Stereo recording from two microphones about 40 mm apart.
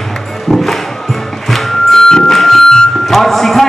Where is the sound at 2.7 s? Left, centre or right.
Centre.